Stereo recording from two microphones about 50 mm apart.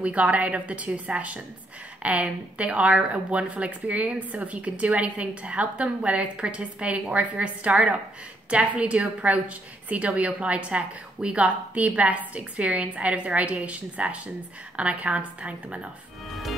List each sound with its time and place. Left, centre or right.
0.0 s a woman's voice: right